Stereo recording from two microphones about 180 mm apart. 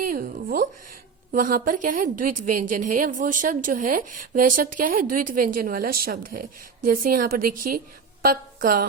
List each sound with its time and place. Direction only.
0.0 s a woman's voice: 50° right (ahead or behind)